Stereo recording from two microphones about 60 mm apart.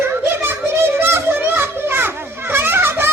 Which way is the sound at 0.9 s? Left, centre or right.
Right.